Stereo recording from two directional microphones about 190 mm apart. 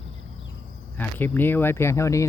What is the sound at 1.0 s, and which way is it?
Speech, 10° left (ahead or behind).